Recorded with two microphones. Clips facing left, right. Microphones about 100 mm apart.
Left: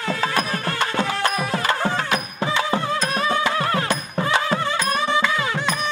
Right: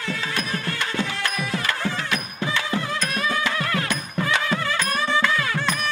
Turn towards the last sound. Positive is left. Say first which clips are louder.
# left 1 dB
turn(degrees=15)  # may be behind; listen again after turning